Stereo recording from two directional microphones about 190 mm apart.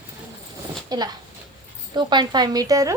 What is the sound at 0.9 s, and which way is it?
Speech, 20° right (ahead or behind).